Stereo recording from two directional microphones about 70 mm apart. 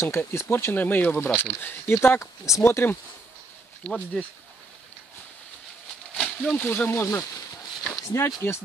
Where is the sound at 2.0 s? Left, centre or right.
Left.